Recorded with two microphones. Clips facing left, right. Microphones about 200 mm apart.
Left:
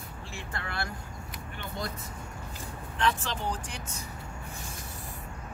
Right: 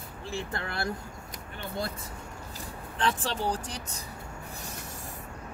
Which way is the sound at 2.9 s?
35° right (ahead or behind).